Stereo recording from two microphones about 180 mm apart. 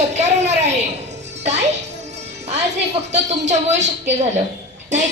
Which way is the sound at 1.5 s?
40° right (ahead or behind).